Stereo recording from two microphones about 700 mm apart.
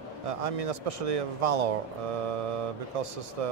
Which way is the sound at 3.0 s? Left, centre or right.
Right.